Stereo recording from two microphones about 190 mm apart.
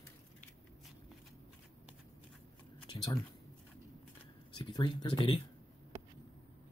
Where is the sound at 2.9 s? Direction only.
20° left (ahead or behind).